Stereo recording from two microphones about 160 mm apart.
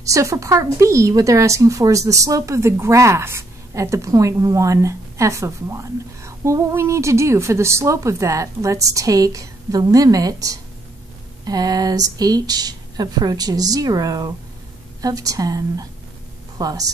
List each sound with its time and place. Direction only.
0.0 s speech: 20° right (ahead or behind)